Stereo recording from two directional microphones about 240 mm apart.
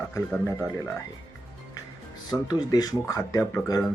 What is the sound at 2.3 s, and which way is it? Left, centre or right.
Speech, centre.